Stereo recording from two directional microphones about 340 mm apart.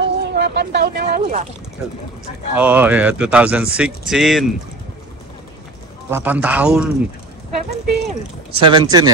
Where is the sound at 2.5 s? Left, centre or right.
Centre.